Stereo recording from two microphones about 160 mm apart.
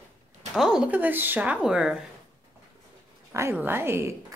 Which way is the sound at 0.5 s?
5° right (ahead or behind).